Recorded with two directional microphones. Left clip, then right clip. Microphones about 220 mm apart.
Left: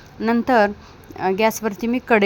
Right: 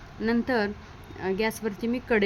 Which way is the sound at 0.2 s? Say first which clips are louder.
Left 10 dB; 15° left (ahead or behind).